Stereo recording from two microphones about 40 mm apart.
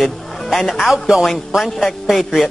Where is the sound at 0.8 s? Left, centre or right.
Centre.